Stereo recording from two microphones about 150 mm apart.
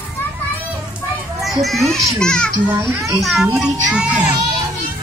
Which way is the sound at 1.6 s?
Centre (ahead or behind).